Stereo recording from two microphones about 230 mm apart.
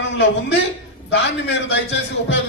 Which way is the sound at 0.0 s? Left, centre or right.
Left.